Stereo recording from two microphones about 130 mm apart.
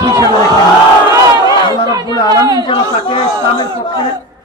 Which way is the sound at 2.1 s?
35° left (ahead or behind).